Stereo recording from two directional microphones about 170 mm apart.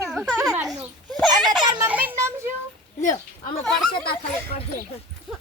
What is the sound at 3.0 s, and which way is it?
Speech, 50° left (ahead or behind).